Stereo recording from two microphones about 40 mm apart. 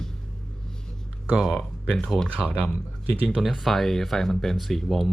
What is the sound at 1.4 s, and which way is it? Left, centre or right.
Speech, centre.